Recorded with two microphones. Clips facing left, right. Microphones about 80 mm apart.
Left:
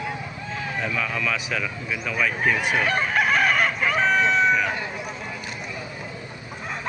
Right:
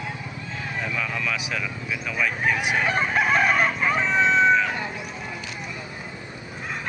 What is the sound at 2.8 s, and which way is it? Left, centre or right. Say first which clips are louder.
Chicken: right 1 dB; right.